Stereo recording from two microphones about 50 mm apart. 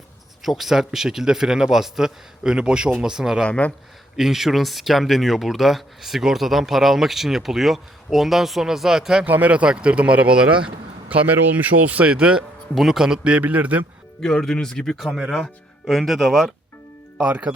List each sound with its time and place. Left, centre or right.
0.4 s speech: centre
3.4 s speech: left
4.2 s speech: centre
9.2 s speech: right
11.1 s speech: right
12.1 s speech: centre
12.7 s speech: centre
13.4 s speech: right
14.2 s speech: centre
14.9 s speech: centre
17.2 s speech: right